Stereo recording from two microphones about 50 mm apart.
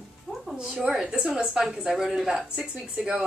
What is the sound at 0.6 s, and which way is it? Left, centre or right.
Speech, centre.